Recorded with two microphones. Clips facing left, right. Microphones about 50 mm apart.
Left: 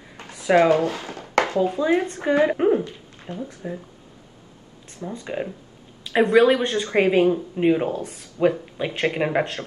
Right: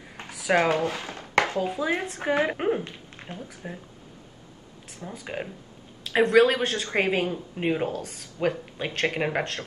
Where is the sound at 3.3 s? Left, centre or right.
Right.